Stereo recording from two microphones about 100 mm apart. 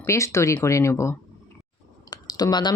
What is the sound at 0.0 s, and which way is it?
Speech, 30° left (ahead or behind).